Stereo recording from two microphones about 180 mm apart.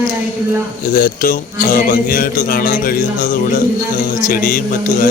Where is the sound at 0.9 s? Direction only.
50° left (ahead or behind).